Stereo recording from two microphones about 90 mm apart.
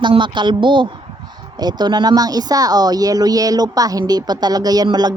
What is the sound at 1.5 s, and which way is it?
Speech, 50° right (ahead or behind).